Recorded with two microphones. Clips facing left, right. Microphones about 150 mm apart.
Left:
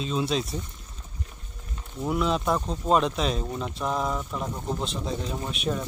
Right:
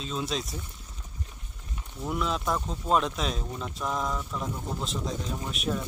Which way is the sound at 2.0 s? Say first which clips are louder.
Left 5 dB; centre (ahead or behind).